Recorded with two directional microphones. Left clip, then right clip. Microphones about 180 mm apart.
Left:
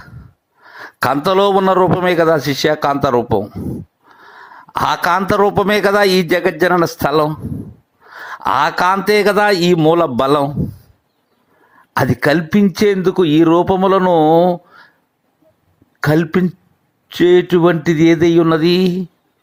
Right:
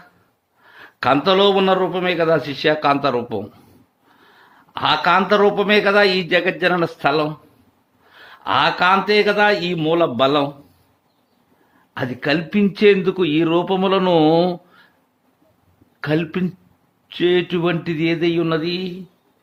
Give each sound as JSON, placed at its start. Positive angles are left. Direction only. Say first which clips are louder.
{"t": 0.7, "sound": "a man's voice", "louder": "left 1 dB", "side_deg": 35}
{"t": 4.7, "sound": "a man's voice", "louder": "left 1 dB", "side_deg": 40}
{"t": 11.9, "sound": "a man's voice", "louder": "left 7 dB", "side_deg": 35}
{"t": 14.1, "sound": "speech", "louder": "left 3 dB", "side_deg": 5}
{"t": 16.0, "sound": "a man's voice", "louder": "left 6 dB", "side_deg": 30}